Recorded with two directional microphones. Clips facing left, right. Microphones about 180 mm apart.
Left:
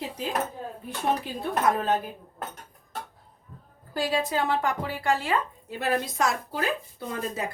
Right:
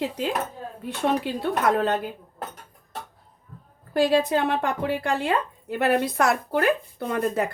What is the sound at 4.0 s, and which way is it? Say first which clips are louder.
Speech: right 6 dB; 60° right (ahead or behind).